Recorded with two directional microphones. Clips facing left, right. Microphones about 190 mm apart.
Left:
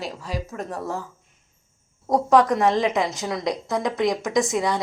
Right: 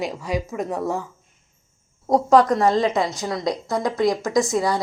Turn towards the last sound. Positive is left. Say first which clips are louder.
# right 2 dB
turn(degrees=20)  # may be behind; listen again after turning